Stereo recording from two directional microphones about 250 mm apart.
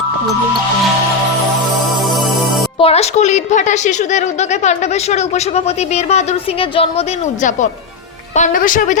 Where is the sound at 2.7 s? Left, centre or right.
Left.